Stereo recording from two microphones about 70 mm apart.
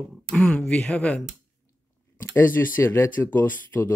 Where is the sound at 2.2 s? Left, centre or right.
Left.